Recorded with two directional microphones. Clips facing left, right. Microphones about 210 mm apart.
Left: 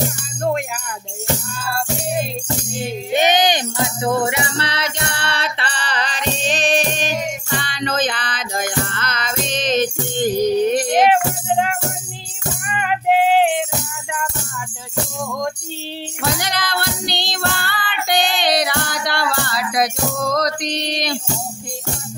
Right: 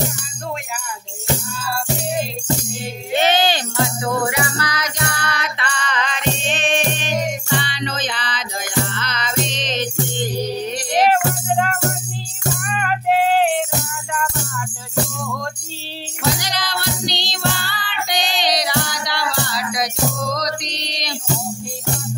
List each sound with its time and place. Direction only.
3.1 s music: 15° left (ahead or behind); by 11.1 s 50° left (ahead or behind)
11.5 s music: 15° left (ahead or behind)
16.3 s music: 55° left (ahead or behind)